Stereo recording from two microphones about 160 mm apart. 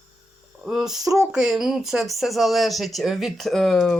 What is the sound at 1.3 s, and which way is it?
Speech, 5° right (ahead or behind).